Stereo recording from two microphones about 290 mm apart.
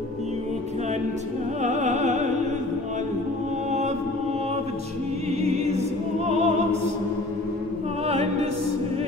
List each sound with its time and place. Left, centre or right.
1.6 s opera: right
5.4 s music: right
8.1 s opera: right